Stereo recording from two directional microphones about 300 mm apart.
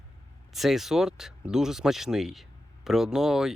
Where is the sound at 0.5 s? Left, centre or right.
Centre.